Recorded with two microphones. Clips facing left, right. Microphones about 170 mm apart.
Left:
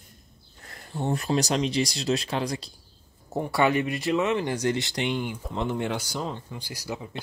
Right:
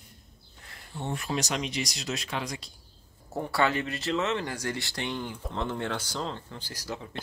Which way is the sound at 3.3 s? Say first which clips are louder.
Left 4 dB; 15° left (ahead or behind).